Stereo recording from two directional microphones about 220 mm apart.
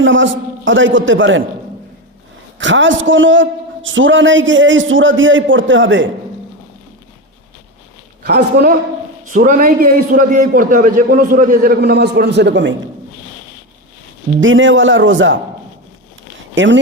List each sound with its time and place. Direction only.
0.0 s a man's voice: 60° right (ahead or behind)
2.6 s a man's voice: 60° right (ahead or behind)
8.2 s a man's voice: 45° right (ahead or behind)
14.4 s a man's voice: 60° right (ahead or behind)
16.6 s a man's voice: 55° right (ahead or behind)